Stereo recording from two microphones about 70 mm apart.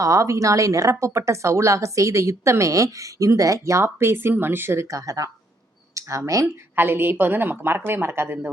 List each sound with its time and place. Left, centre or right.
0.0 s speech: right
6.7 s a woman's voice: right